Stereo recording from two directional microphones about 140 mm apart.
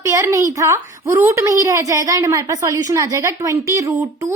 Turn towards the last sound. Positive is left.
turn(degrees=-20)  # may be behind; listen again after turning